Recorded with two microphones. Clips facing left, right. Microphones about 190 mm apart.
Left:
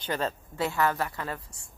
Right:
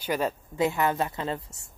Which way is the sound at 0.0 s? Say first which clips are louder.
Right 3 dB; 10° right (ahead or behind).